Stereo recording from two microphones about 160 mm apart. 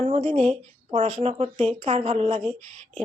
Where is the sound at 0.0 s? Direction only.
45° right (ahead or behind).